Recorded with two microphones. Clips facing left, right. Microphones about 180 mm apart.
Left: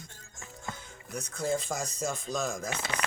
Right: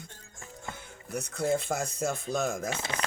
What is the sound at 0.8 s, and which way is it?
Speech, 60° right (ahead or behind).